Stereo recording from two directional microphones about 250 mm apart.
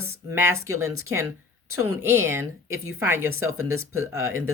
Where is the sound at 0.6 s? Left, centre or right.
Right.